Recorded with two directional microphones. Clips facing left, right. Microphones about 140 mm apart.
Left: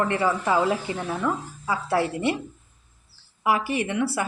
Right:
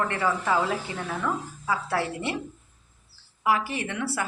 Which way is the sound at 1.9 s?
15° left (ahead or behind).